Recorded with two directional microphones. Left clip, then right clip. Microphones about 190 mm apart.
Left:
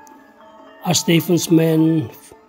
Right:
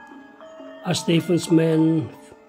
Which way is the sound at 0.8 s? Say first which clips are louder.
Left 5 dB; 40° left (ahead or behind).